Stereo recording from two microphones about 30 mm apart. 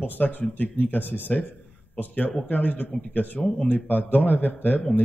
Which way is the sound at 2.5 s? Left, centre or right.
Left.